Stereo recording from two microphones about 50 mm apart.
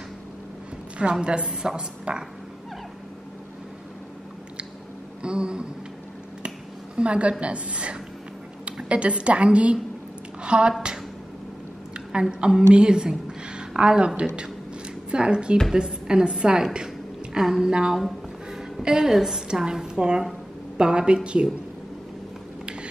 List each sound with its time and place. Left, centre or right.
1.2 s a woman's voice: centre
5.2 s a woman's voice: centre
7.0 s a woman's voice: right
12.1 s a woman's voice: centre
13.3 s a sound: centre
15.0 s a woman's voice: centre
17.9 s a sound: centre
19.1 s a woman's voice: centre